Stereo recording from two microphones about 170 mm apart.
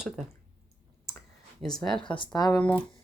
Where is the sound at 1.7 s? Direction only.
Centre (ahead or behind).